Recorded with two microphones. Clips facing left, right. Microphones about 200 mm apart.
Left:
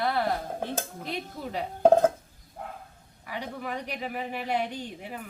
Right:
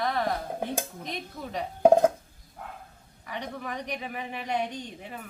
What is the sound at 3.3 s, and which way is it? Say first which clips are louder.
A woman's voice: left 1 dB; 10° left (ahead or behind).